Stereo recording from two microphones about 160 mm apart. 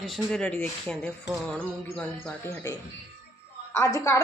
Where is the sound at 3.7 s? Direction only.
15° left (ahead or behind).